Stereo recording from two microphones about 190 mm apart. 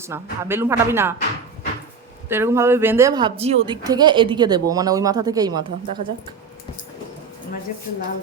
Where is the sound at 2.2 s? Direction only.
10° right (ahead or behind).